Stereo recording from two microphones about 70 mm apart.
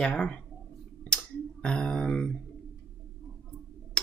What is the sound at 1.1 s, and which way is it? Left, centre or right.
Finger snapping, centre.